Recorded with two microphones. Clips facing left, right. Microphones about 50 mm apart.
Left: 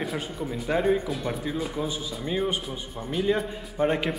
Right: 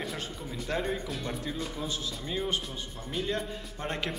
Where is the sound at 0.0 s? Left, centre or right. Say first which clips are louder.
Left 6 dB; centre.